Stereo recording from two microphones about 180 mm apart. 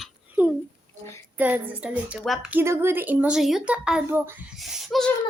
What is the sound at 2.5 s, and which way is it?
Speech, 15° right (ahead or behind).